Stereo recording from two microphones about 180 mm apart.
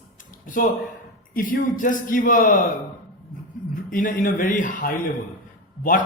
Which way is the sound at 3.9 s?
50° left (ahead or behind).